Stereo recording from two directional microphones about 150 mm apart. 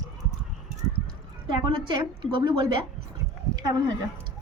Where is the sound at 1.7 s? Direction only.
30° right (ahead or behind).